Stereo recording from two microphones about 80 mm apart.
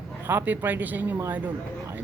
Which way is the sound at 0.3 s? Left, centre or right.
Right.